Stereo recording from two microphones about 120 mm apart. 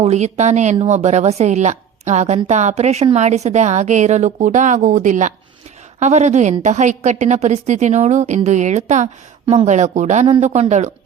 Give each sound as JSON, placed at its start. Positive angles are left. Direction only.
{"t": 0.0, "sound": "a woman's voice", "side_deg": -70}
{"t": 6.0, "sound": "a woman's voice", "side_deg": -75}